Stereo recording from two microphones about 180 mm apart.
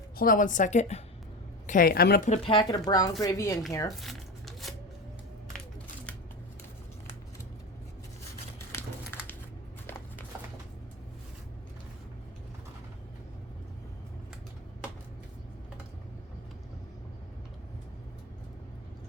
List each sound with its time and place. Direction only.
0.2 s a woman's voice: 50° left (ahead or behind)
1.6 s a woman's voice: 50° left (ahead or behind)
2.3 s speech: 30° left (ahead or behind)
3.8 s crumpling: centre (ahead or behind)
8.7 s a sound: 15° left (ahead or behind)